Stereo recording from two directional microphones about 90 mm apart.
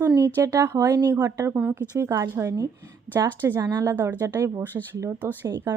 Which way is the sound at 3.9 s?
25° right (ahead or behind).